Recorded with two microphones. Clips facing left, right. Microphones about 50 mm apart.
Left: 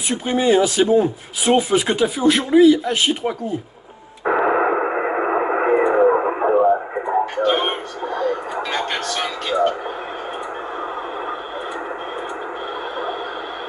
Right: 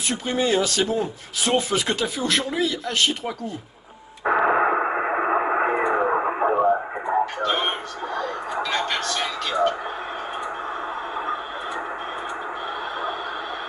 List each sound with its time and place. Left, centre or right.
0.1 s speech: centre
4.2 s radio: centre
7.3 s a sound: left